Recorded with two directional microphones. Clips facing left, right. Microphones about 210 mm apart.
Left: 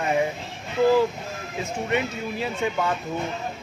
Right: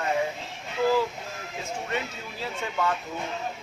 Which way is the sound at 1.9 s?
20° left (ahead or behind).